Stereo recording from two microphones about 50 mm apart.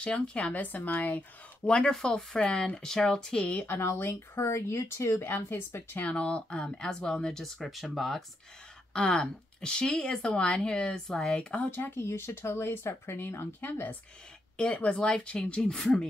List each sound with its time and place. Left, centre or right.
0.0 s a woman's voice: left
1.7 s speech: left
2.0 s speech: centre
2.3 s speech: left
3.5 s a woman's voice: left
3.8 s speech: left
6.0 s speech: left; by 8.2 s centre
8.9 s speech: left
11.7 s speech: left
14.6 s speech: left